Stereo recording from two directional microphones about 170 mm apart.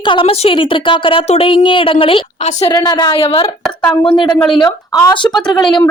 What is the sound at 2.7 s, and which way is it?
A woman's voice, 20° left (ahead or behind).